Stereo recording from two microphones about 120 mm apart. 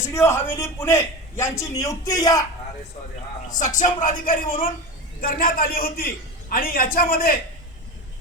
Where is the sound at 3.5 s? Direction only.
90° left.